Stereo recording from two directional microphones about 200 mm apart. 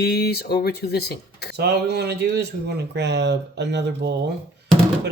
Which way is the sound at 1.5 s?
55° right (ahead or behind).